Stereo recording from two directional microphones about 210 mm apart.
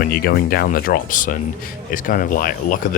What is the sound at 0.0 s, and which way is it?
Speech, 45° left (ahead or behind).